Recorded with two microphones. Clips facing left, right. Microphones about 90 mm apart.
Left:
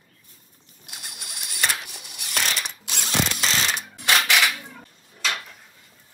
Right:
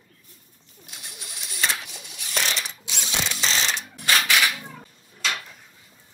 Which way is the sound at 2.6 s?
55° left (ahead or behind).